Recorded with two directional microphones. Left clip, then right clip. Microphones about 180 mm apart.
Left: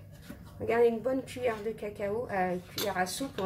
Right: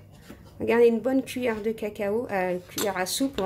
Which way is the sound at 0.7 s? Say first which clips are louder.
Right 6 dB; 45° right (ahead or behind).